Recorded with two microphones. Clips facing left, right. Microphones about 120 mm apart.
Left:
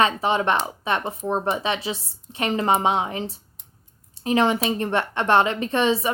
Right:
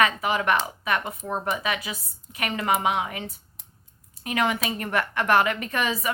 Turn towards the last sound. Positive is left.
turn(degrees=25)  # may be behind; listen again after turning